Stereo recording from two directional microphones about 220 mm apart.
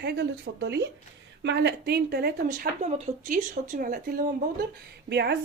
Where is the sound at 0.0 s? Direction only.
50° right (ahead or behind).